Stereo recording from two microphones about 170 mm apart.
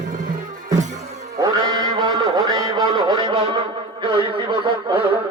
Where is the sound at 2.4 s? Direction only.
25° right (ahead or behind).